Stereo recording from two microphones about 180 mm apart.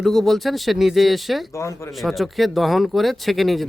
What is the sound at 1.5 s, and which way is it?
Speech, 15° left (ahead or behind).